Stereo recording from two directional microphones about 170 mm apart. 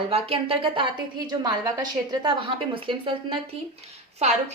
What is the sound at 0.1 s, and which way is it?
A woman's voice, 35° right (ahead or behind).